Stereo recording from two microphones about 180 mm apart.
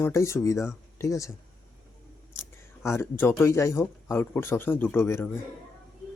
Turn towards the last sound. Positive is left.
turn(degrees=10)  # may be behind; listen again after turning